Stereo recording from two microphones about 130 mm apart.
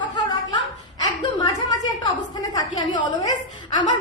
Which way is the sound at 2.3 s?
30° left (ahead or behind).